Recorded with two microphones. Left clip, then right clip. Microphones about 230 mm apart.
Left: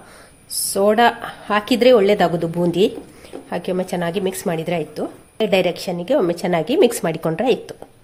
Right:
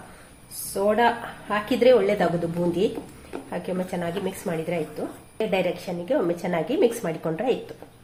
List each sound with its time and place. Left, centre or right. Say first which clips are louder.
0.7 s a woman's voice: left 6 dB; left